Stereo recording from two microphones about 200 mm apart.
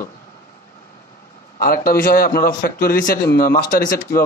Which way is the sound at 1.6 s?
45° left (ahead or behind).